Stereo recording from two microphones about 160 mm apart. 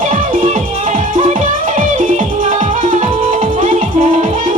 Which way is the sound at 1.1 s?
60° right (ahead or behind).